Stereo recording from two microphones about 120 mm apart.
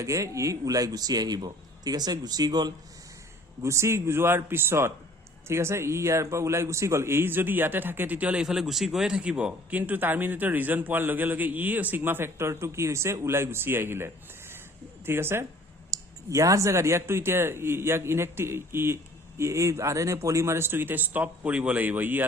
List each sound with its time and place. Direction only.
0.0 s a man's voice: 25° right (ahead or behind)
3.6 s a man's voice: 25° right (ahead or behind)